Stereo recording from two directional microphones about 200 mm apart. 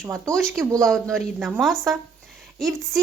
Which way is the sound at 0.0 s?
15° right (ahead or behind).